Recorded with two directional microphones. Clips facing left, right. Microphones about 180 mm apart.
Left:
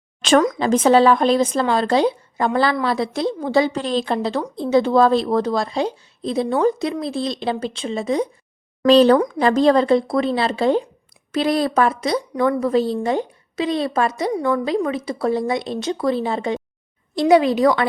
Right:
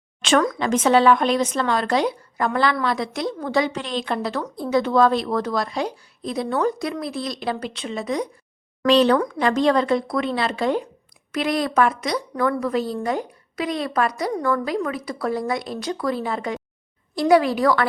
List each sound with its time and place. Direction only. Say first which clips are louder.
0.6 s a woman's voice: left 3 dB; 30° left (ahead or behind)